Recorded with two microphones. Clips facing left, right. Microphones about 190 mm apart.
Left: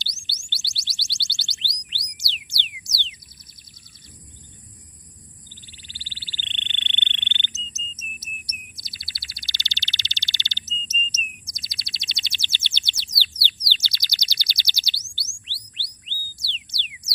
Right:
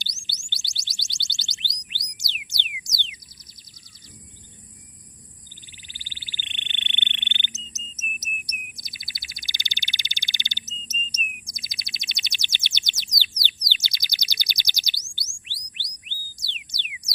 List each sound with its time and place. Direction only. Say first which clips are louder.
0.5 s chirp tone: left 2 dB; 15° right (ahead or behind)
2.1 s music: left 1 dB; 15° right (ahead or behind)
5.7 s frog: left 2 dB; 15° right (ahead or behind)
8.7 s a sound: even; 15° right (ahead or behind)